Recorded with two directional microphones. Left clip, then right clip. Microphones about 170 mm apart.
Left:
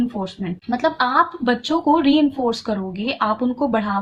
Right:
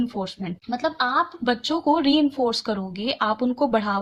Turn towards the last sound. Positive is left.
turn(degrees=-35)  # may be behind; listen again after turning